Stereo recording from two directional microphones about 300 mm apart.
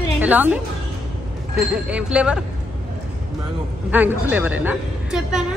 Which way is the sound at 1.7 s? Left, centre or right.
Centre.